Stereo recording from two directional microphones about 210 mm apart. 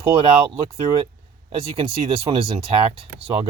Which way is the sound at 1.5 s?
25° right (ahead or behind).